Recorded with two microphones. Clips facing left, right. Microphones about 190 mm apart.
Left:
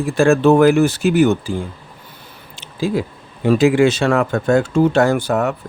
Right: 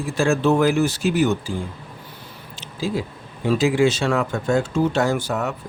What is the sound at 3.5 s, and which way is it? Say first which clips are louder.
Speech: left 5 dB; 60° left (ahead or behind).